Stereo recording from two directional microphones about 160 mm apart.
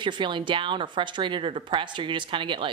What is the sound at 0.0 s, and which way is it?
A woman's voice, 30° right (ahead or behind).